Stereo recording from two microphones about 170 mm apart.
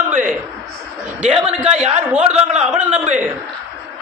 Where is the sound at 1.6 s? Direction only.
40° right (ahead or behind).